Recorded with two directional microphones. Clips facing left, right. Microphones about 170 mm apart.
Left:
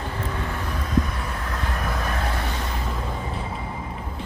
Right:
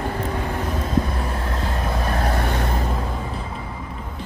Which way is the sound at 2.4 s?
50° right (ahead or behind).